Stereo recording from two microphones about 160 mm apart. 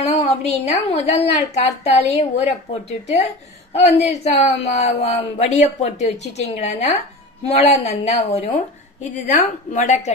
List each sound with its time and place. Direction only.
0.0 s a sound: 40° left (ahead or behind)
0.7 s a woman's voice: 40° left (ahead or behind)
9.8 s a woman's voice: 45° left (ahead or behind)